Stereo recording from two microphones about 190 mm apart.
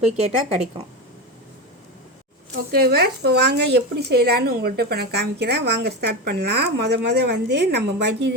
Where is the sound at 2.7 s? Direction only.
55° right (ahead or behind).